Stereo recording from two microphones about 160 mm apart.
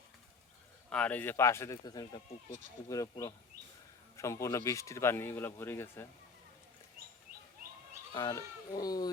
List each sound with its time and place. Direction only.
0.9 s speech: 5° left (ahead or behind)
8.1 s speech: 20° left (ahead or behind)